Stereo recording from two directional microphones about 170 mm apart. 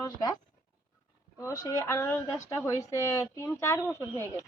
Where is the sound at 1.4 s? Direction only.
20° left (ahead or behind).